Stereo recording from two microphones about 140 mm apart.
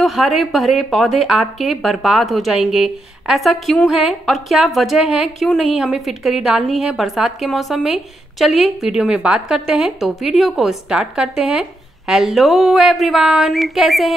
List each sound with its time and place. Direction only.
0.0 s speech: centre (ahead or behind)